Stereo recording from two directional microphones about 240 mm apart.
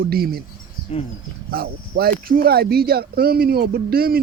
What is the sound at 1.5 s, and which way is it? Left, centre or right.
Speech, right.